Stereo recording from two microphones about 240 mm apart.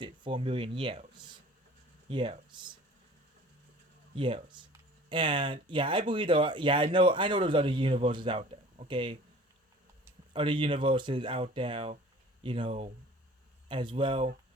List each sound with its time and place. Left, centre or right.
0.0 s speech: right
4.1 s speech: right
10.3 s speech: centre